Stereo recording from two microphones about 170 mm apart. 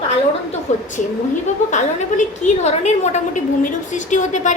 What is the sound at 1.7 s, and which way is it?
A woman's voice, 45° left (ahead or behind).